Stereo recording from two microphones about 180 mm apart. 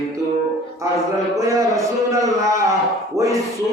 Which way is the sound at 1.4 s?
20° right (ahead or behind).